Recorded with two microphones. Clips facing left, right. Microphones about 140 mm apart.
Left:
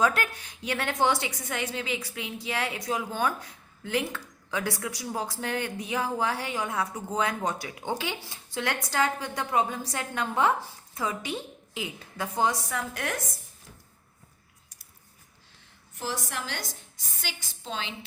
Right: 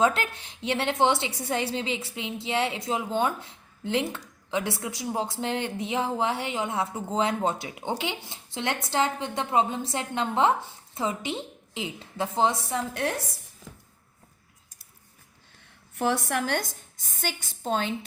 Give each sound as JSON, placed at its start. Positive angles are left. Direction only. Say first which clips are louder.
{"t": 0.0, "sound": "a woman's voice", "louder": "right 2 dB", "side_deg": -25}
{"t": 16.0, "sound": "a woman's voice", "louder": "right 8 dB", "side_deg": -60}